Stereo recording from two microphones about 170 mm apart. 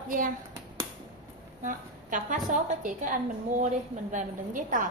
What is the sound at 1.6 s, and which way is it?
A woman's voice, 50° right (ahead or behind).